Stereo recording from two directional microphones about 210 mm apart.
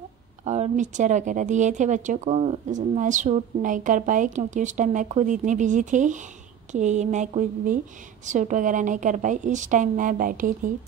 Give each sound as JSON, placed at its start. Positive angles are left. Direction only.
{"t": 0.5, "sound": "speech", "side_deg": -35}